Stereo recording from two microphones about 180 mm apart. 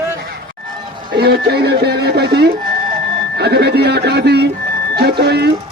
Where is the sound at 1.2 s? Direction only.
60° right (ahead or behind).